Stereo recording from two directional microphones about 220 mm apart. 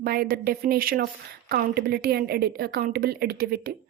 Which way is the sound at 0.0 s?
45° right (ahead or behind).